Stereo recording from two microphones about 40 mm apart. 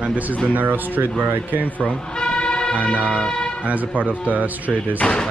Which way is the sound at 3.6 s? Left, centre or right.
Right.